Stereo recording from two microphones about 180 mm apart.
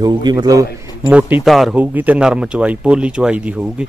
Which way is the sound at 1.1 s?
10° right (ahead or behind).